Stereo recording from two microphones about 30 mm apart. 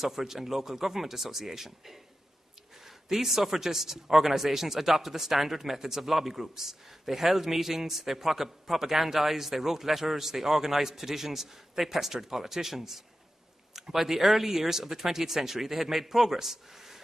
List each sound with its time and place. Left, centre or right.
0.0 s a man's voice: centre
3.1 s a man's voice: centre